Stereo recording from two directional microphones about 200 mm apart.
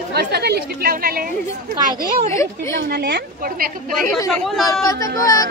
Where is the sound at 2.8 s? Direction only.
55° right (ahead or behind).